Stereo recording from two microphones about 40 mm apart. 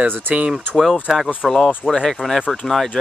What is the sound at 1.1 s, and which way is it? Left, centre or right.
Speech, centre.